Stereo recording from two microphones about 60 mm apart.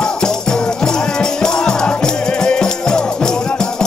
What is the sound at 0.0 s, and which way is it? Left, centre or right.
Music, centre.